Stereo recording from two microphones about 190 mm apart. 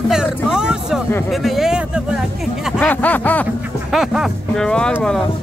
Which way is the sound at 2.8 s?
10° left (ahead or behind).